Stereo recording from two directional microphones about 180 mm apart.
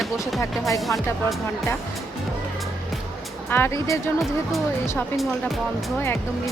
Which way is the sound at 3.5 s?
10° left (ahead or behind).